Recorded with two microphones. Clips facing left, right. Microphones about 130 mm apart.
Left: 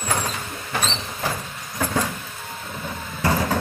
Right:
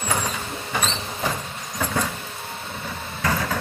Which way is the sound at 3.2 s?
20° left (ahead or behind).